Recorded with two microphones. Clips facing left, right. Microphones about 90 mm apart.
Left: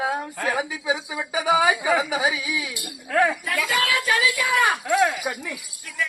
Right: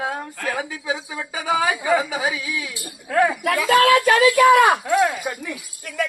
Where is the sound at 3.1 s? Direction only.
5° right (ahead or behind).